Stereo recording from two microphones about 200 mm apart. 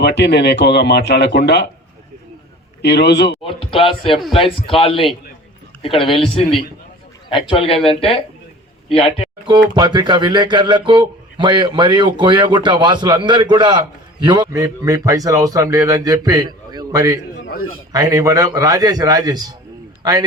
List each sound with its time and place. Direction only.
0.0 s speech: 55° left (ahead or behind)
2.8 s speech: 60° left (ahead or behind)
3.4 s speech: 25° left (ahead or behind)
9.5 s a man's voice: 20° right (ahead or behind)